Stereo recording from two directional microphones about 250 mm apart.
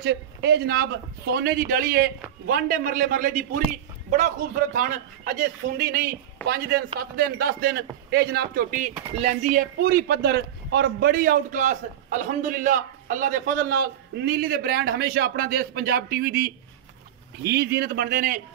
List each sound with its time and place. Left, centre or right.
0.0 s a man's voice: right
4.7 s a man's voice: right